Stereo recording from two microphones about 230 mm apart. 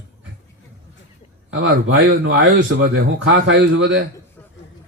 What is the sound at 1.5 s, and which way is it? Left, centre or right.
A man's voice, right.